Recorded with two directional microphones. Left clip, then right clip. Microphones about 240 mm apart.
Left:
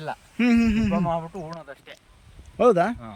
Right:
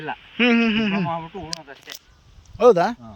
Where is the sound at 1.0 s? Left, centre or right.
Left.